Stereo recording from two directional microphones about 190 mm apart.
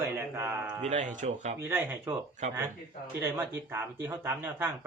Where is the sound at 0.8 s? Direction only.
40° right (ahead or behind).